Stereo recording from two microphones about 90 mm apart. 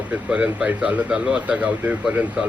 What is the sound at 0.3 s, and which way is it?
Speech, 10° right (ahead or behind).